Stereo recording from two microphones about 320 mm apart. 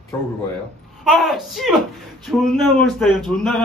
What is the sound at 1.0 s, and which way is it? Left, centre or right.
A man's voice, centre.